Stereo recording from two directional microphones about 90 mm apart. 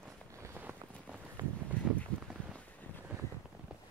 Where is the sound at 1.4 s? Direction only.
45° right (ahead or behind).